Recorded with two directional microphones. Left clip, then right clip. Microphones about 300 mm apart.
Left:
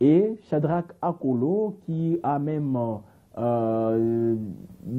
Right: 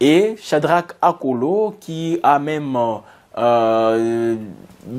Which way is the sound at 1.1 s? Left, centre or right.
Right.